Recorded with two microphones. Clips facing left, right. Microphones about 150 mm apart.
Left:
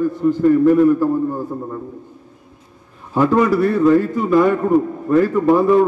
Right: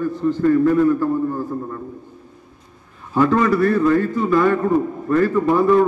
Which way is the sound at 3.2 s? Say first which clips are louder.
Left 1 dB; 10° left (ahead or behind).